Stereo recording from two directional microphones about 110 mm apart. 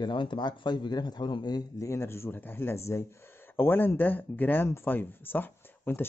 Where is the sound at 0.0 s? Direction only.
45° left (ahead or behind).